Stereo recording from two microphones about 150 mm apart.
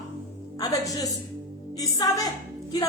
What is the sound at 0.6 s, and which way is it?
A woman's voice, 25° left (ahead or behind).